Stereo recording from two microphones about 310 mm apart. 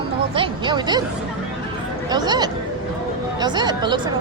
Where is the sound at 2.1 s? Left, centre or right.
Centre.